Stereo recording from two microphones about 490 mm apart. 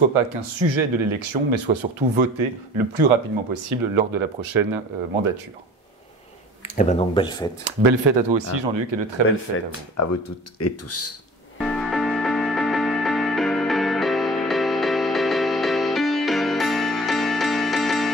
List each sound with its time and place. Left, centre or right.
0.1 s speech: right
3.6 s speech: right
6.6 s speech: centre
7.6 s speech: right
9.5 s speech: left
11.5 s music: centre